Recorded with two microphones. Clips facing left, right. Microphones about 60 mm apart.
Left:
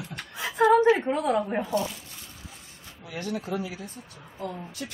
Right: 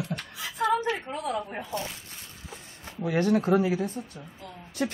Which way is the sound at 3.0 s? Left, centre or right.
Right.